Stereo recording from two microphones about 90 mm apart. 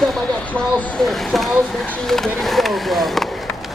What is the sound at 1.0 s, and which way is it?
Speech, centre (ahead or behind).